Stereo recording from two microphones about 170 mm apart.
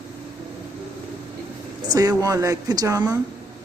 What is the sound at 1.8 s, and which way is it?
Speech, 25° right (ahead or behind).